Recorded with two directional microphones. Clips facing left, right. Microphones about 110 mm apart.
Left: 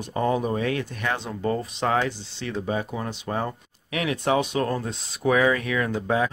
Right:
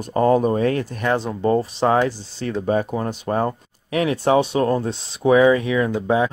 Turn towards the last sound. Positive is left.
turn(degrees=-20)  # may be behind; listen again after turning